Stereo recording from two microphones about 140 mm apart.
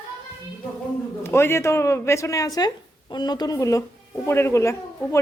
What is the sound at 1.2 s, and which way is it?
Speech, 15° left (ahead or behind).